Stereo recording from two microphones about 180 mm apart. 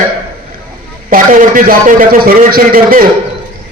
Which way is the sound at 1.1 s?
50° right (ahead or behind).